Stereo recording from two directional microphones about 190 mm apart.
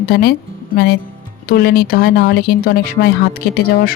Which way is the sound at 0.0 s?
50° left (ahead or behind).